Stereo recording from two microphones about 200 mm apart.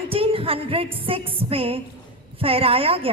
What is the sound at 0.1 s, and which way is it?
Music, 30° right (ahead or behind).